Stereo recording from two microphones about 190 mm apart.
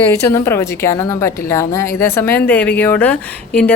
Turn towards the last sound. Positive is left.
turn(degrees=5)  # may be behind; listen again after turning